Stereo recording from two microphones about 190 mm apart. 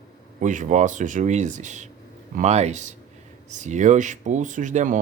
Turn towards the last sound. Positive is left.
turn(degrees=-40)  # may be behind; listen again after turning